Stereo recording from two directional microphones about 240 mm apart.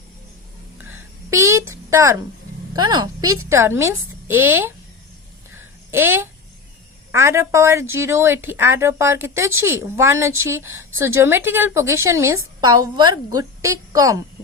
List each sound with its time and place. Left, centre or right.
0.9 s a sound: centre
2.7 s speech: centre
5.9 s speech: centre